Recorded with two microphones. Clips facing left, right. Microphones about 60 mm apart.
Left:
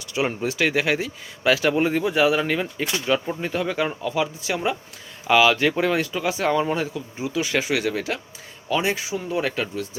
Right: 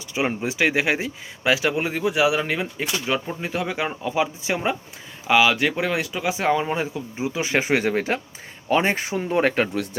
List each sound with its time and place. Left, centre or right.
0.1 s speech: centre
5.3 s speech: centre; by 9.8 s right